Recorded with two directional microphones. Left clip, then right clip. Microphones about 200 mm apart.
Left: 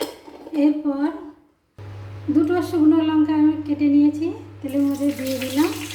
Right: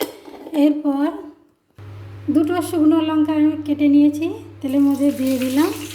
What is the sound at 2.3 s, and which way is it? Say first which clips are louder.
A woman's voice: right 1 dB; 35° right (ahead or behind).